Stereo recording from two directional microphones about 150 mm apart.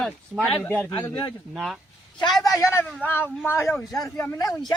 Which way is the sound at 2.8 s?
10° left (ahead or behind).